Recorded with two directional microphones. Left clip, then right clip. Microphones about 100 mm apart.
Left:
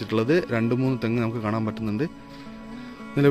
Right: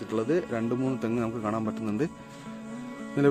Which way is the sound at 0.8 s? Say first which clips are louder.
Left 4 dB; 5° left (ahead or behind).